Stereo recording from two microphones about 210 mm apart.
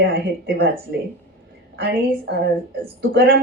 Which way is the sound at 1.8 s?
50° right (ahead or behind).